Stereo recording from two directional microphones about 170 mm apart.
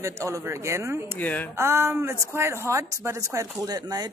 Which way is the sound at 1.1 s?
10° left (ahead or behind).